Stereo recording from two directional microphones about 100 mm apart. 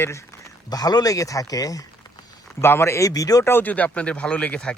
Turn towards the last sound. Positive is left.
turn(degrees=10)  # may be behind; listen again after turning